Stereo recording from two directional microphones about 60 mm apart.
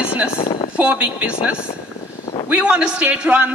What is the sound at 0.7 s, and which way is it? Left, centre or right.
A man's voice, right.